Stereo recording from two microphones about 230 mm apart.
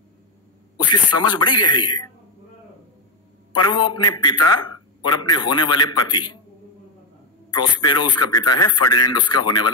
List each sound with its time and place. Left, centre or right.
0.7 s a man's voice: centre
3.5 s a man's voice: centre
7.5 s a man's voice: centre